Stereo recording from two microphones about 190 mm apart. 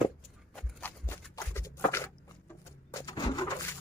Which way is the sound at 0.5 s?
10° left (ahead or behind).